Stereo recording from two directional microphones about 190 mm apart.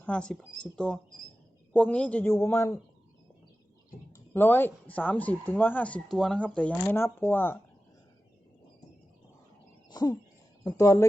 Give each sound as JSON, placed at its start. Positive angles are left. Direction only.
{"t": 0.0, "sound": "speech", "side_deg": 5}
{"t": 4.1, "sound": "speech", "side_deg": 10}
{"t": 9.9, "sound": "a sound", "side_deg": 20}
{"t": 10.6, "sound": "speech", "side_deg": 15}